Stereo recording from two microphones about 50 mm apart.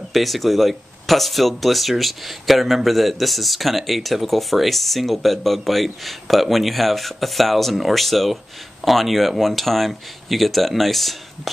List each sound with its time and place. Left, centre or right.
0.1 s a man's voice: centre